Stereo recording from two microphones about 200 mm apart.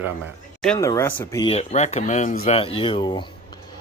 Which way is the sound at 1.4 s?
30° left (ahead or behind).